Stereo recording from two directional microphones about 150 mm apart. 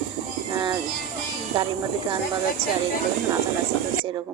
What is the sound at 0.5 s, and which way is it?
A woman's voice, 30° right (ahead or behind).